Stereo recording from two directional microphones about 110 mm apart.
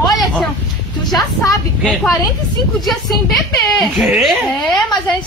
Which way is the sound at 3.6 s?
Centre (ahead or behind).